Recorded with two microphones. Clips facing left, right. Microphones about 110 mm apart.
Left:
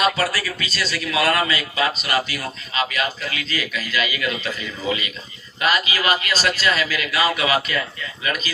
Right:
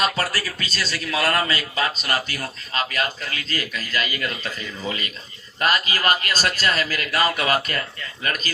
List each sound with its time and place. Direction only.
0.0 s a man's voice: 35° right (ahead or behind)